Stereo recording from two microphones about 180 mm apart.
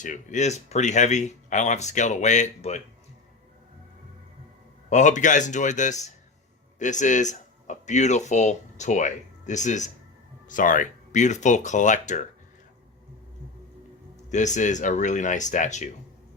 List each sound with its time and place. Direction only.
0.0 s speech: 45° left (ahead or behind)
4.9 s speech: 40° left (ahead or behind)
14.3 s speech: 40° left (ahead or behind)